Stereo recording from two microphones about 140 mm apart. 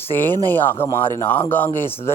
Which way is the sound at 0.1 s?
15° left (ahead or behind).